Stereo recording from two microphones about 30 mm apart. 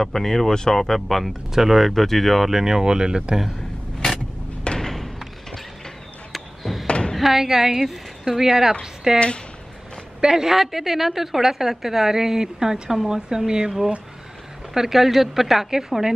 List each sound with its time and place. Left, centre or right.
0.0 s speech: centre
1.5 s speech: centre
2.5 s speech: centre
4.0 s vehicle: left
4.7 s thump: centre
6.3 s a sound: centre
6.9 s a sound: left
7.2 s a woman's voice: centre
10.4 s a woman's voice: centre
13.5 s speech: right
14.7 s a woman's voice: centre